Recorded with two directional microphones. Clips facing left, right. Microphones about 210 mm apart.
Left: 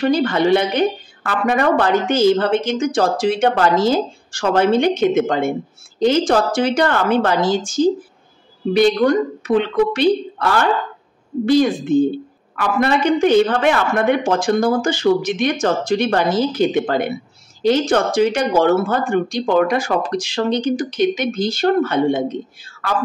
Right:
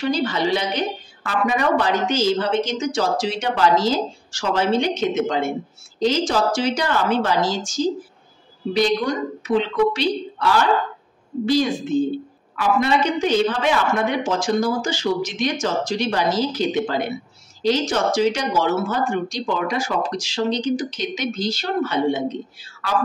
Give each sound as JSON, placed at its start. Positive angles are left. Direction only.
{"t": 0.0, "sound": "a woman's voice", "side_deg": 55}